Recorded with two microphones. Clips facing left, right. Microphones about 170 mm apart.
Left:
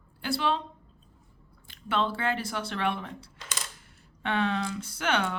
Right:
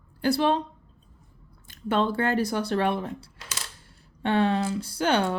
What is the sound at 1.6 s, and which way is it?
Speech, 40° right (ahead or behind).